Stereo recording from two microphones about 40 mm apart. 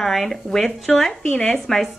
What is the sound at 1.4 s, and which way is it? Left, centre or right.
Speech, left.